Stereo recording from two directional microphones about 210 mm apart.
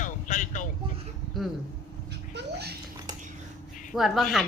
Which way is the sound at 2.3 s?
50° right (ahead or behind).